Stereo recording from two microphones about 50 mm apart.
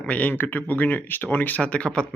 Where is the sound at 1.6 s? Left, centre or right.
Left.